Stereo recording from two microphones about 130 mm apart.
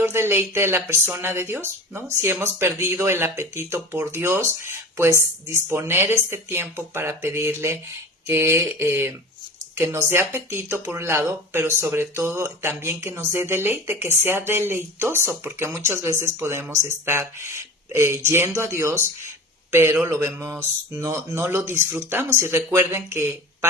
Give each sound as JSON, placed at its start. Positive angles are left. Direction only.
{"t": 0.0, "sound": "speech", "side_deg": -20}